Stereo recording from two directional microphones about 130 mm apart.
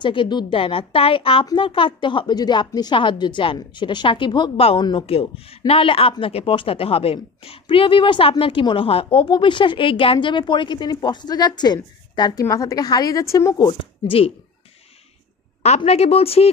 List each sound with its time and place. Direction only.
0.0 s a woman's voice: 40° left (ahead or behind)
15.6 s a woman's voice: 55° left (ahead or behind)